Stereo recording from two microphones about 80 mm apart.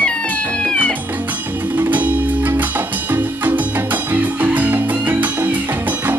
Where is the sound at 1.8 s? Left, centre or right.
Right.